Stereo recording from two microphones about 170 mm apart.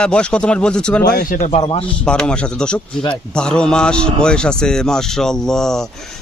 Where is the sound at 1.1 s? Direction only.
55° left (ahead or behind).